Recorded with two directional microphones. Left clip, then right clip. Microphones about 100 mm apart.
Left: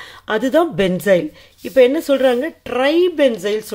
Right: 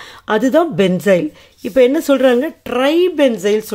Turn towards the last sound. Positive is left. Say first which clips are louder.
# right 2 dB
turn(degrees=-30)  # may be behind; listen again after turning